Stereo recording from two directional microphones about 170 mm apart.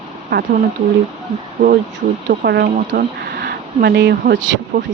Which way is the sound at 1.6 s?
50° right (ahead or behind).